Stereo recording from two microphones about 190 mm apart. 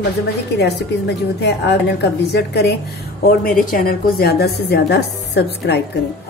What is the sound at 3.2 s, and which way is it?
A woman's voice, 50° left (ahead or behind).